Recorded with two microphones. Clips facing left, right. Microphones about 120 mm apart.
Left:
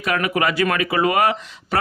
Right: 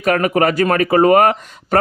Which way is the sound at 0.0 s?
45° right (ahead or behind).